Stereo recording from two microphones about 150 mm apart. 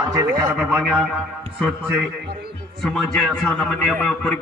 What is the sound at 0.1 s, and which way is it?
Speech, 20° right (ahead or behind).